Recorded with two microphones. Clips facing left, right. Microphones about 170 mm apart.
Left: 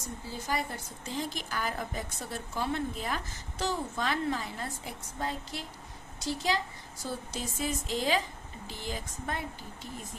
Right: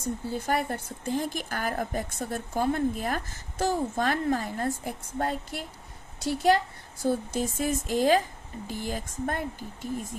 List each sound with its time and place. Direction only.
0.3 s a woman's voice: 55° right (ahead or behind)